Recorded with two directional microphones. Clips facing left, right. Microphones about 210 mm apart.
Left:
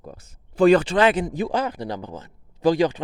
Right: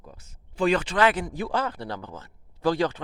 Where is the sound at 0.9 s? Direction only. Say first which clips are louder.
Left 4 dB; 20° left (ahead or behind).